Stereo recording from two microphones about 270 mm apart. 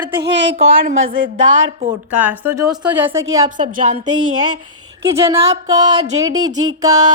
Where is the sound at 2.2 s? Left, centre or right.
Centre.